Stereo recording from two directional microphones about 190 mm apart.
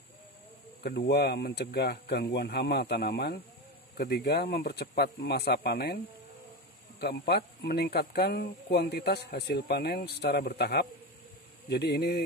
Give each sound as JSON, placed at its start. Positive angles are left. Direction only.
{"t": 0.8, "sound": "speech", "side_deg": 60}
{"t": 7.0, "sound": "speech", "side_deg": 60}